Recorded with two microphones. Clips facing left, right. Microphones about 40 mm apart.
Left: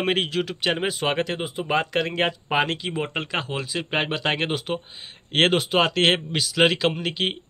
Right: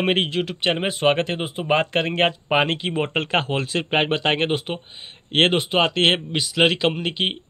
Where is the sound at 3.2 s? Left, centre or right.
Right.